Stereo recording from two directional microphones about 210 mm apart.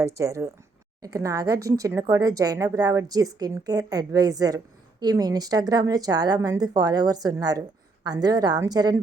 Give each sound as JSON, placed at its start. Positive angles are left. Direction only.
{"t": 0.0, "sound": "a woman's voice", "side_deg": -15}